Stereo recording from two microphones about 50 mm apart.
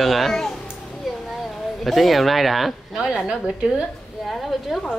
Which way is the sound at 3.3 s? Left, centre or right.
Centre.